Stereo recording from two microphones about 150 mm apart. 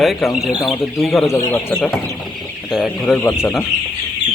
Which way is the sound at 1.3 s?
20° left (ahead or behind).